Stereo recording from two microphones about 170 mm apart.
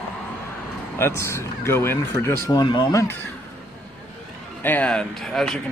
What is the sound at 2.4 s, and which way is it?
Speech, 25° left (ahead or behind).